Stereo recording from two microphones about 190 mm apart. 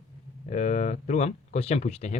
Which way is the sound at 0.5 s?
35° left (ahead or behind).